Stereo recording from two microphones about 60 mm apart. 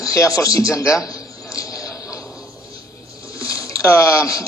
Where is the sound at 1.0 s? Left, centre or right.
Left.